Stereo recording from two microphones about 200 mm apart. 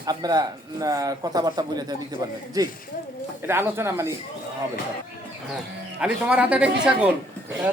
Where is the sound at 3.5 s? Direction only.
10° right (ahead or behind).